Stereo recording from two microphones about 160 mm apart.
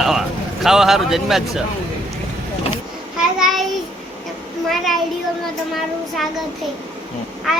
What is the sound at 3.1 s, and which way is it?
Child singing, centre (ahead or behind).